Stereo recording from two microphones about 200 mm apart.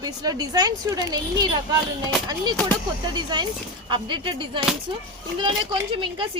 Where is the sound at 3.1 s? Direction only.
20° right (ahead or behind).